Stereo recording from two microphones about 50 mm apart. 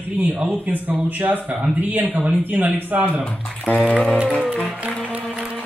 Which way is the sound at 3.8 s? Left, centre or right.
Left.